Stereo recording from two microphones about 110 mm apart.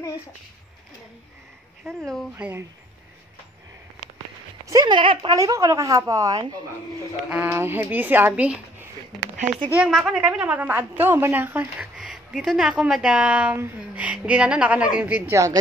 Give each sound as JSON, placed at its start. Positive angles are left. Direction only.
{"t": 1.9, "sound": "speech", "side_deg": 5}
{"t": 2.3, "sound": "a woman's voice", "side_deg": -15}
{"t": 4.6, "sound": "speech", "side_deg": -40}
{"t": 5.3, "sound": "speech", "side_deg": -30}
{"t": 7.2, "sound": "a woman's voice", "side_deg": -10}
{"t": 7.5, "sound": "a woman's voice", "side_deg": -20}
{"t": 9.8, "sound": "a woman's voice", "side_deg": -5}
{"t": 12.0, "sound": "a woman's voice", "side_deg": -5}